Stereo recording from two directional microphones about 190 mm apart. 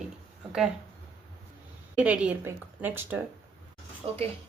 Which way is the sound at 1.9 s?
5° right (ahead or behind).